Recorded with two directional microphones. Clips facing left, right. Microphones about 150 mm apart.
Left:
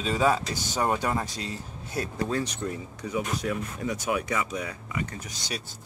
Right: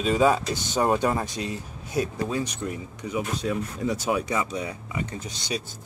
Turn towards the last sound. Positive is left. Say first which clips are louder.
# right 5 dB
turn(degrees=-20)  # may be behind; listen again after turning